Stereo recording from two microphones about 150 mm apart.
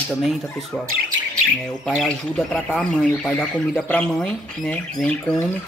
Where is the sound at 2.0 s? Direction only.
5° left (ahead or behind).